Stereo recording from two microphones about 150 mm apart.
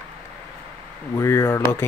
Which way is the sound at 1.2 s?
20° left (ahead or behind).